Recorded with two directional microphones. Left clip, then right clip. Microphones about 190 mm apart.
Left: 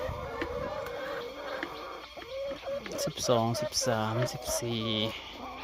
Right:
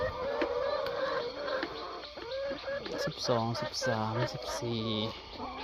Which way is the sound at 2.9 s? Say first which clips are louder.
Left 4 dB; 25° left (ahead or behind).